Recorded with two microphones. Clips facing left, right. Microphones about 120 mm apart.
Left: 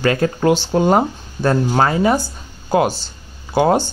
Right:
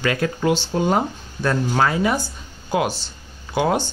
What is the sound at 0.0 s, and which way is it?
Speech, 35° left (ahead or behind).